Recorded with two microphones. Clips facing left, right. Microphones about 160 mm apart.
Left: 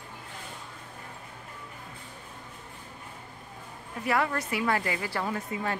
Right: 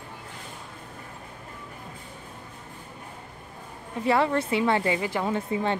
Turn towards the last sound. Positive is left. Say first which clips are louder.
# right 5 dB
turn(degrees=-25)  # may be behind; listen again after turning